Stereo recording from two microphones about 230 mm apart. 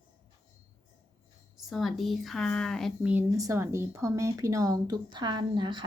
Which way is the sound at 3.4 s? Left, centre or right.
Centre.